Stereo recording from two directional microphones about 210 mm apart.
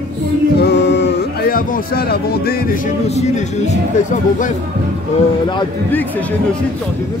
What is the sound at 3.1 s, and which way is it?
Speech, 30° left (ahead or behind).